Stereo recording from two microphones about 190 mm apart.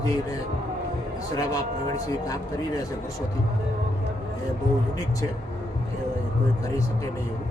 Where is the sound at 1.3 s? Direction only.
20° left (ahead or behind).